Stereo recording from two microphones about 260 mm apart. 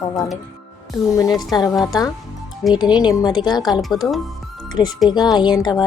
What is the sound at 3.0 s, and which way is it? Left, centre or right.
Speech, centre.